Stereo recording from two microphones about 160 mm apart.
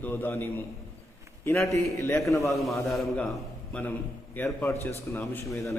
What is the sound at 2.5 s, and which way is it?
A man's voice, centre (ahead or behind).